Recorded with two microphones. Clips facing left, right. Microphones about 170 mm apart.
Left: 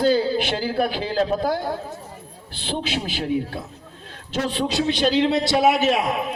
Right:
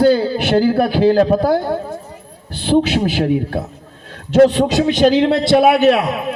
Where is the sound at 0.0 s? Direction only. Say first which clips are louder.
Right 6 dB; 55° right (ahead or behind).